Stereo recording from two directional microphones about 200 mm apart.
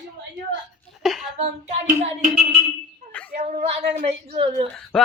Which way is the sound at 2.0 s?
35° right (ahead or behind).